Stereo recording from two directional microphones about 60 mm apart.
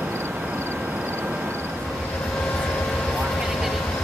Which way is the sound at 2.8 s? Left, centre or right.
Centre.